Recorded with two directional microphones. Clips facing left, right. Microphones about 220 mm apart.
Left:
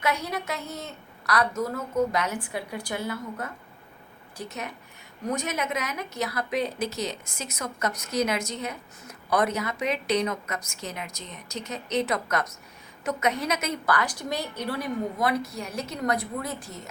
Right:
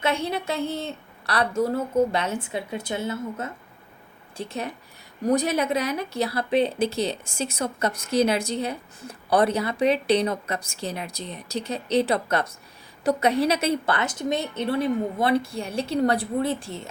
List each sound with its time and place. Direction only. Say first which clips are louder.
0.0 s a woman's voice: right 3 dB; 25° right (ahead or behind)